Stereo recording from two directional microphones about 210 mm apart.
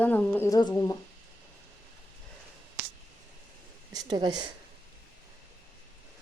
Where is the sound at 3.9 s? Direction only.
20° right (ahead or behind).